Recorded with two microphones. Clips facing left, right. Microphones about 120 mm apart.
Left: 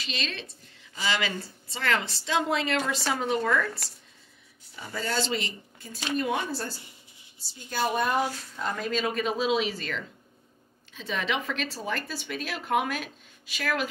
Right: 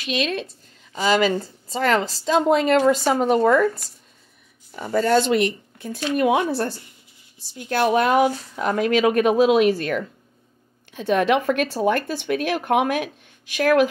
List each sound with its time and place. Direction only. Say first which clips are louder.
0.0 s speech: right 11 dB; 55° right (ahead or behind)
0.9 s a woman's voice: right 10 dB; 40° right (ahead or behind)
4.7 s speech: right 12 dB; 65° right (ahead or behind)
7.5 s speech: right 9 dB; 70° right (ahead or behind)